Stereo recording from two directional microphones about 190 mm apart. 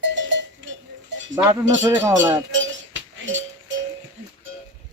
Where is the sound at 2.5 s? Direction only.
80° right.